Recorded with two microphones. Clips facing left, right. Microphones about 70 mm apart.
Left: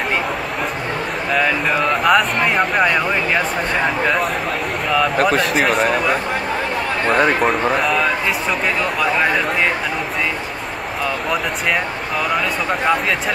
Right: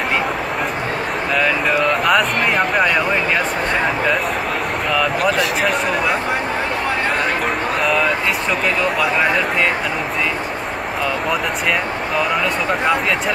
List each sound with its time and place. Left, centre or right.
1.8 s speech: centre
5.1 s speech: left
7.4 s a man's voice: centre